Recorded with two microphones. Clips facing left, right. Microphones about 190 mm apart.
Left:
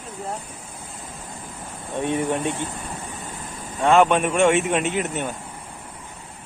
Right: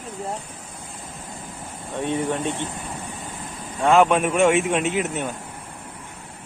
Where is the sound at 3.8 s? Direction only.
Centre (ahead or behind).